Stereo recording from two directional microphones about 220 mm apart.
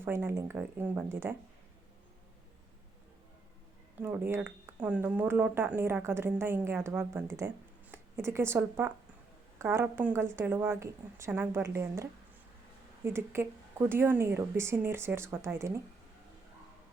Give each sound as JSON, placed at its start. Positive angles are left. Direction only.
{"t": 0.0, "sound": "speech", "side_deg": -10}
{"t": 4.0, "sound": "speech", "side_deg": -10}
{"t": 13.1, "sound": "speech", "side_deg": -10}